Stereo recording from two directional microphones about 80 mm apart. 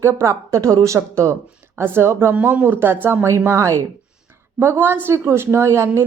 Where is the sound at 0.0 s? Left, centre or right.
Right.